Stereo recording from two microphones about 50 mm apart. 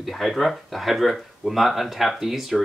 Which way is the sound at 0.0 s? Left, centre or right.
Centre.